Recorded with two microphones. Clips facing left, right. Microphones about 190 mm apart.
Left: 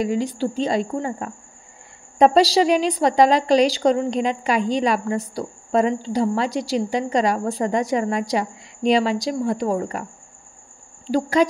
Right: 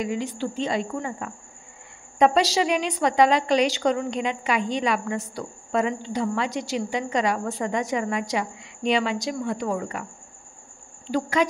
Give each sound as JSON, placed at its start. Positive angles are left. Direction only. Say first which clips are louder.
{"t": 0.0, "sound": "a woman's voice", "louder": "left 5 dB", "side_deg": 35}
{"t": 11.1, "sound": "a woman's voice", "louder": "left 5 dB", "side_deg": 35}